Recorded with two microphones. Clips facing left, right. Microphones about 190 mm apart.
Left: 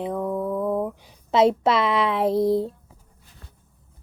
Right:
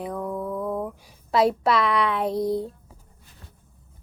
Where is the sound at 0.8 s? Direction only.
20° left (ahead or behind).